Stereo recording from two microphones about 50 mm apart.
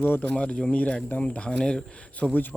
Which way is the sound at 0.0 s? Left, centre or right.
Left.